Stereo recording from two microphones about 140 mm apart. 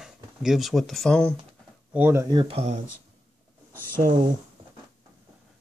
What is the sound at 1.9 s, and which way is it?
Speech, 15° right (ahead or behind).